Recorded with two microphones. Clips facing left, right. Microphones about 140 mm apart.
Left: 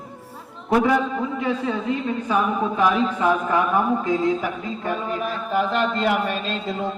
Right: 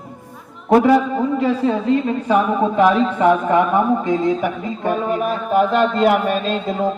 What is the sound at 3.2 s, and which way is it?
Speech, 25° right (ahead or behind).